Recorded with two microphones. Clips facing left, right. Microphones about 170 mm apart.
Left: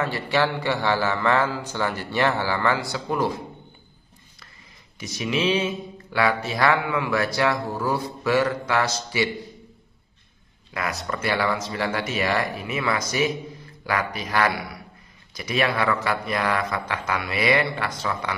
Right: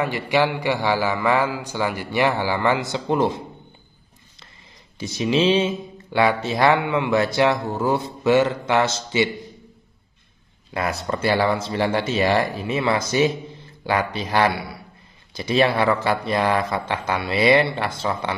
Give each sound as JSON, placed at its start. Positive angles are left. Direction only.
{"t": 0.0, "sound": "a man's voice", "side_deg": -15}
{"t": 4.9, "sound": "speech", "side_deg": -30}
{"t": 10.7, "sound": "speech", "side_deg": -30}